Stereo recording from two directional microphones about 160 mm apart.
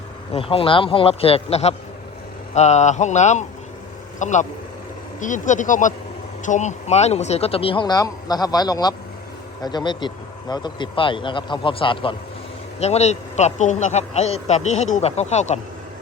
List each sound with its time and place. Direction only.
0.3 s speech: 35° left (ahead or behind)